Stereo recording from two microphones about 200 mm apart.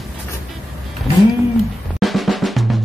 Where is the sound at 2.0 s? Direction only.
Centre (ahead or behind).